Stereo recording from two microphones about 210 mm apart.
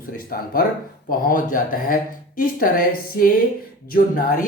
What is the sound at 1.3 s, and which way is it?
Speech, 40° left (ahead or behind).